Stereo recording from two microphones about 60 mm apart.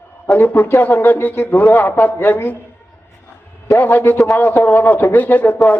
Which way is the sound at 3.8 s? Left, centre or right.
Left.